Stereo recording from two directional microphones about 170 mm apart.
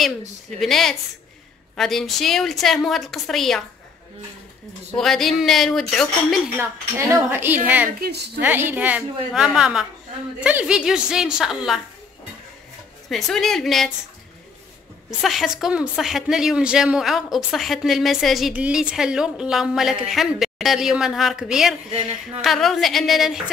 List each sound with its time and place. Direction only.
0.6 s speech: centre (ahead or behind)
4.9 s speech: centre (ahead or behind)
6.6 s a woman's voice: 15° right (ahead or behind)
8.0 s a woman's voice: 75° right (ahead or behind)
8.4 s a woman's voice: 10° right (ahead or behind)
13.1 s speech: centre (ahead or behind)
15.2 s speech: centre (ahead or behind)